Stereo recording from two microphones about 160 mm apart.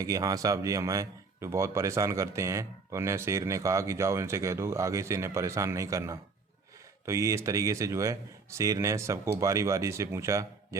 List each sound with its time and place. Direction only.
0.0 s speech: 20° right (ahead or behind)